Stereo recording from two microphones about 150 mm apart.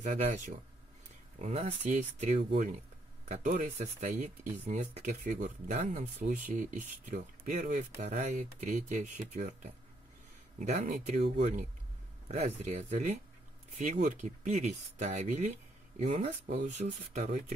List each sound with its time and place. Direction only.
0.0 s speech: 50° right (ahead or behind)